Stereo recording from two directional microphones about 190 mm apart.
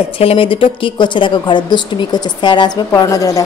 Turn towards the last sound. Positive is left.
turn(degrees=15)  # may be behind; listen again after turning